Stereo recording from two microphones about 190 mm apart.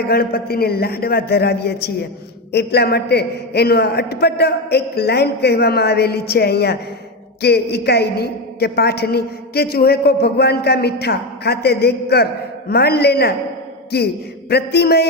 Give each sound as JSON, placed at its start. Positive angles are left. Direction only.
{"t": 0.1, "sound": "a woman's voice", "side_deg": 55}